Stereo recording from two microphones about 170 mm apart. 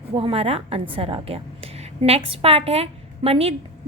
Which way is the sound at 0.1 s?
35° right (ahead or behind).